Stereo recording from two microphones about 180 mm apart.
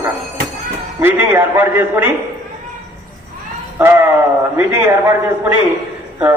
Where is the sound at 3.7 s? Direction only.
10° right (ahead or behind).